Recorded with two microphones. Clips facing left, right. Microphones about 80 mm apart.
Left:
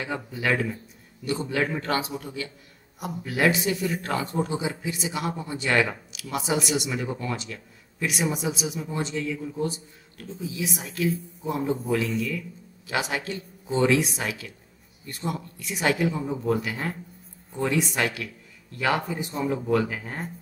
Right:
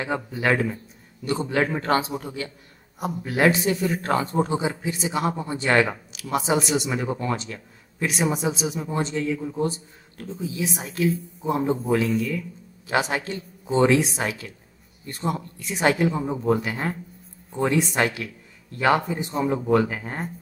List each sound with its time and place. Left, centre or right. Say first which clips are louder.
0.0 s a man's voice: right 4 dB; right